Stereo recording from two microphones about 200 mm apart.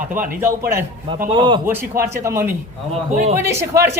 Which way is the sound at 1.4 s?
20° right (ahead or behind).